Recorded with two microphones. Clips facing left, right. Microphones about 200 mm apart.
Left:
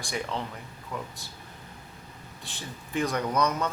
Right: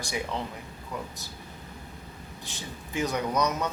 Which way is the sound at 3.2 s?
15° right (ahead or behind).